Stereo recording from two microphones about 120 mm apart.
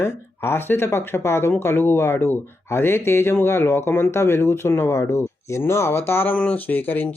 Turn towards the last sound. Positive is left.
turn(degrees=15)  # may be behind; listen again after turning